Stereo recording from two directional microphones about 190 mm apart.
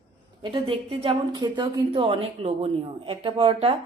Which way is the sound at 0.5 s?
30° right (ahead or behind).